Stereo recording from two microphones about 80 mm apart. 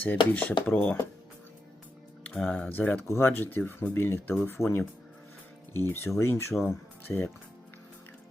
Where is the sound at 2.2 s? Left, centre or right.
Centre.